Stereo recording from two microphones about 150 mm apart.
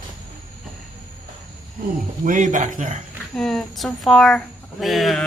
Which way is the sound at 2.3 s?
60° right (ahead or behind).